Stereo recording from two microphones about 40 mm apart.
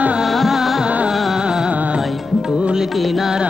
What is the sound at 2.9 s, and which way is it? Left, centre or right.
Music, centre.